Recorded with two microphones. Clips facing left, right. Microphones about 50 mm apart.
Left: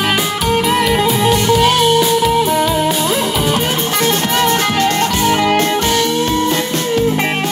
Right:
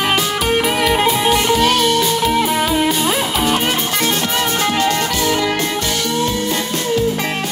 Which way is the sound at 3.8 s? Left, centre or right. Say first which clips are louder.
Left 3 dB; left.